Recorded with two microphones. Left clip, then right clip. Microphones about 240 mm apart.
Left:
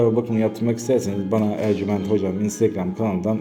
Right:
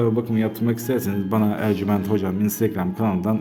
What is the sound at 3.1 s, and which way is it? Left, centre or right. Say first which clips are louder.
Speech: left 2 dB; right.